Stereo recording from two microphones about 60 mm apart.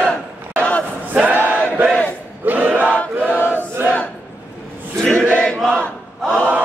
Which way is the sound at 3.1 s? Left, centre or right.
Right.